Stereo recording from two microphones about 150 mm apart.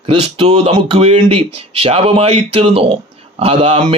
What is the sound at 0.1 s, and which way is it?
Speech, 40° right (ahead or behind).